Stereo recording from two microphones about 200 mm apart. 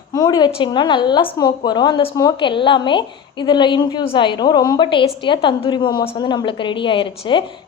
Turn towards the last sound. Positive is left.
turn(degrees=25)  # may be behind; listen again after turning